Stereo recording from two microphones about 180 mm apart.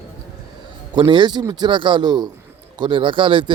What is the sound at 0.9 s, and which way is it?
Speech, 25° right (ahead or behind).